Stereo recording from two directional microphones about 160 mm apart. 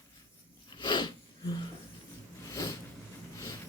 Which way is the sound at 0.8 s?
30° left (ahead or behind).